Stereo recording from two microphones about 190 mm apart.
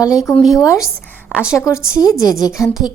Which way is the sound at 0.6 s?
15° left (ahead or behind).